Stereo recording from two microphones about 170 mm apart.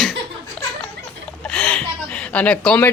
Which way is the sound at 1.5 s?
5° left (ahead or behind).